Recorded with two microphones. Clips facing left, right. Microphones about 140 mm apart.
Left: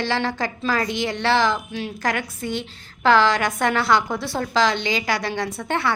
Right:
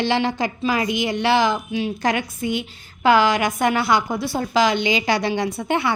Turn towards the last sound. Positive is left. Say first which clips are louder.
# right 2 dB
turn(degrees=-15)  # may be behind; listen again after turning